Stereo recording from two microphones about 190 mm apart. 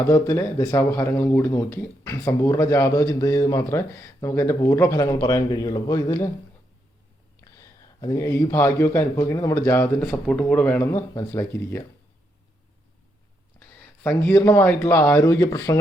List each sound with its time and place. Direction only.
0.1 s speech: 15° left (ahead or behind)
7.4 s speech: 15° left (ahead or behind)
13.6 s speech: 10° left (ahead or behind)